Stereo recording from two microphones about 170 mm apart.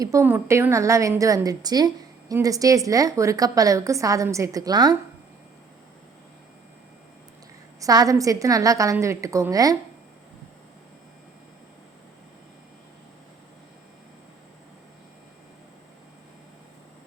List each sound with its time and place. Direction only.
0.0 s a woman's voice: 15° right (ahead or behind)
7.8 s a woman's voice: 20° right (ahead or behind)